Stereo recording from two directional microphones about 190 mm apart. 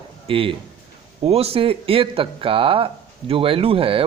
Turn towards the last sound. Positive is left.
turn(degrees=-30)  # may be behind; listen again after turning